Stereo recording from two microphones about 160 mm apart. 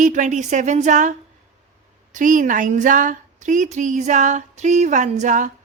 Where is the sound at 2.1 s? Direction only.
55° right (ahead or behind).